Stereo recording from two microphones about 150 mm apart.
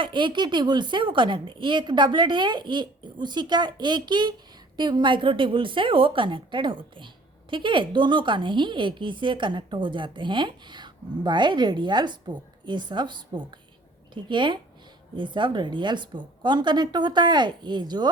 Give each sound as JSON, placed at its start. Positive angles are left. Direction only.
{"t": 0.0, "sound": "a woman's voice", "side_deg": -35}